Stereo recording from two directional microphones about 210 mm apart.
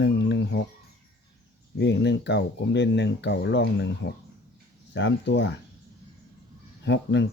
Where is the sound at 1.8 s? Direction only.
55° left (ahead or behind).